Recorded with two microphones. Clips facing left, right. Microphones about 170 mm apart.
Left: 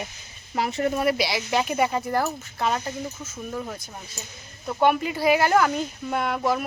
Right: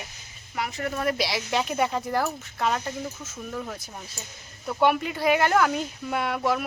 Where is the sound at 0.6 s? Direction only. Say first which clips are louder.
Left 6 dB; 25° left (ahead or behind).